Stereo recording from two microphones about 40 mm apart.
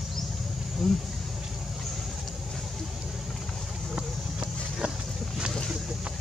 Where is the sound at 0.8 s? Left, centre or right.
Centre.